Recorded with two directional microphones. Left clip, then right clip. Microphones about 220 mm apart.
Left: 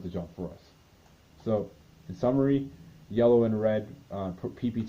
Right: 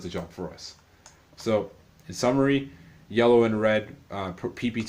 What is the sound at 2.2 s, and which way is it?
Speech, 40° right (ahead or behind).